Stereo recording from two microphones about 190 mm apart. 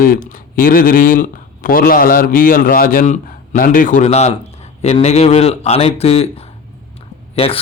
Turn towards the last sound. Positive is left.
turn(degrees=30)  # may be behind; listen again after turning